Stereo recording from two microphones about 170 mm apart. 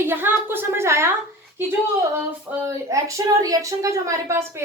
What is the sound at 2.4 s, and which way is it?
A woman's voice, 15° right (ahead or behind).